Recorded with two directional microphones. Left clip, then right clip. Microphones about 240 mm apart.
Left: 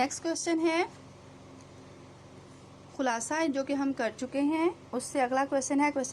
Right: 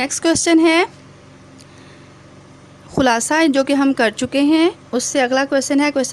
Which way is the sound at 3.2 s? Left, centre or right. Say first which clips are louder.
Right 15 dB; right.